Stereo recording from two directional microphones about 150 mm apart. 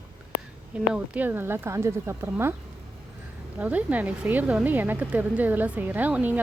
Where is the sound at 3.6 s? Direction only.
10° right (ahead or behind).